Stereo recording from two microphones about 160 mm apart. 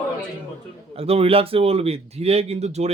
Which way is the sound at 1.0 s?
40° right (ahead or behind).